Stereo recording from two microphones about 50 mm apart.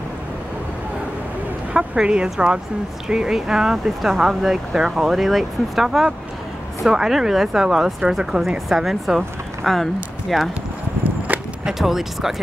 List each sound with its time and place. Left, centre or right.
1.7 s speech: centre
11.6 s speech: centre